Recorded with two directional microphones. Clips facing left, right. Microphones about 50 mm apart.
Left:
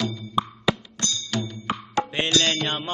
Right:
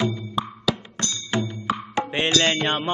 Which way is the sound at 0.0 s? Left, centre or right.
Right.